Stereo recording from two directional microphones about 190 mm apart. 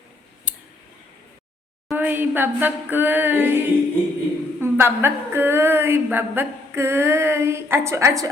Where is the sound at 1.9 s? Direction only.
10° right (ahead or behind).